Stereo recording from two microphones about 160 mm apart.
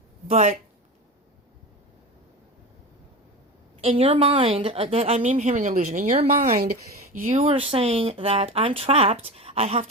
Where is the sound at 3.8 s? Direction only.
40° right (ahead or behind).